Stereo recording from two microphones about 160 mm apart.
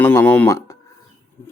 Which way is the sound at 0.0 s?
10° left (ahead or behind).